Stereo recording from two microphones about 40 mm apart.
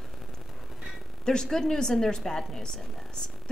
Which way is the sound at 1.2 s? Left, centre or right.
Centre.